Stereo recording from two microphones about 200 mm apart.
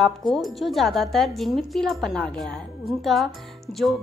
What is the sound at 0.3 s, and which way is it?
A woman's voice, centre (ahead or behind).